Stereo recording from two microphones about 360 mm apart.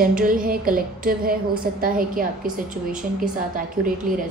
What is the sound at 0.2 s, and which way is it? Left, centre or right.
A woman's voice, right.